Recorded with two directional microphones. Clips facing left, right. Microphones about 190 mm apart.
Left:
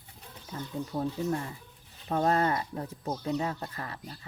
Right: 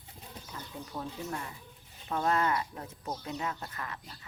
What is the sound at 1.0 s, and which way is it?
Speech, 35° left (ahead or behind).